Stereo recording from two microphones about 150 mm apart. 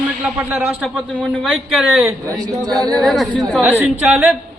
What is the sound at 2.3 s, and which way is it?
Speech, 25° right (ahead or behind).